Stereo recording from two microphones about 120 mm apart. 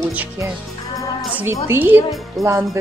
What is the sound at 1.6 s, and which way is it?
Speech, 20° right (ahead or behind).